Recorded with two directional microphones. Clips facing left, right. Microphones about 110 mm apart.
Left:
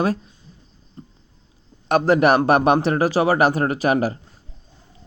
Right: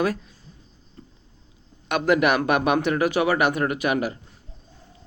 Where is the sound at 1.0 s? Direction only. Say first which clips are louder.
Left 5 dB; 25° left (ahead or behind).